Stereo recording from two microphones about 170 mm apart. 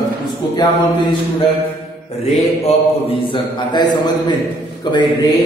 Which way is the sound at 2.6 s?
30° left (ahead or behind).